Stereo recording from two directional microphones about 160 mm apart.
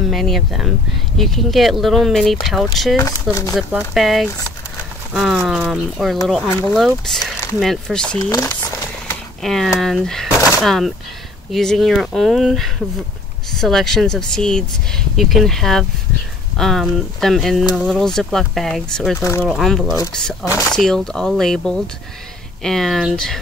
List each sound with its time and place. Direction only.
0.1 s speech: centre (ahead or behind)
3.0 s speech: 20° left (ahead or behind)
3.9 s speech: centre (ahead or behind)
9.4 s speech: centre (ahead or behind)